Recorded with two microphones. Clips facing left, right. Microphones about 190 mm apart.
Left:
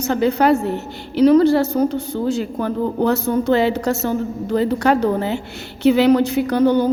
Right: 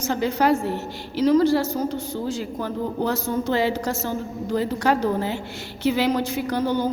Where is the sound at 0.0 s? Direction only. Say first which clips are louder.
Left 5 dB; 60° left (ahead or behind).